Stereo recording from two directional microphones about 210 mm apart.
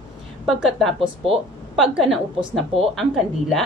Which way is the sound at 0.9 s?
25° right (ahead or behind).